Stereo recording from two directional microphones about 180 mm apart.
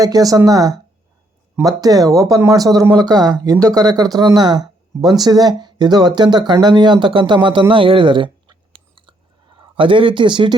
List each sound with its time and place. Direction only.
0.0 s speech: 20° right (ahead or behind)